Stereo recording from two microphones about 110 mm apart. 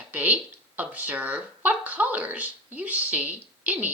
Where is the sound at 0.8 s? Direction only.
15° right (ahead or behind).